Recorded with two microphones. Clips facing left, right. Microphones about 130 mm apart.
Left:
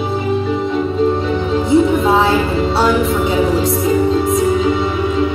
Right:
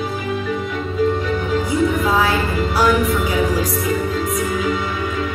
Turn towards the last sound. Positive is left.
turn(degrees=25)  # may be behind; listen again after turning